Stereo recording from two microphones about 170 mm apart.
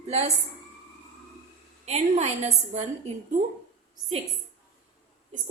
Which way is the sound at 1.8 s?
40° right (ahead or behind).